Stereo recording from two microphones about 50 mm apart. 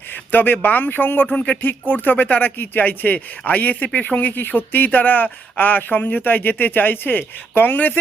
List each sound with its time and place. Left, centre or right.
0.1 s speech: left